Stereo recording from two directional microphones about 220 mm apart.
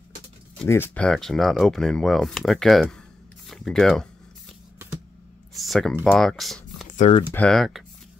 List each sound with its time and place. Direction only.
0.6 s speech: 10° left (ahead or behind)
5.5 s speech: centre (ahead or behind)
6.9 s typing: 35° left (ahead or behind)
7.3 s speech: 5° left (ahead or behind)